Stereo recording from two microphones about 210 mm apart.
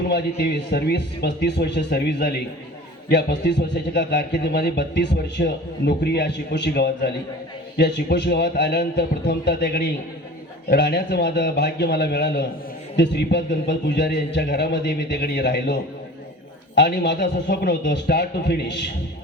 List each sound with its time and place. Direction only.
0.1 s a man's voice: 50° left (ahead or behind)